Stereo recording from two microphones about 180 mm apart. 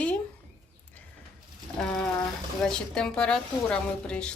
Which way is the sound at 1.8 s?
5° left (ahead or behind).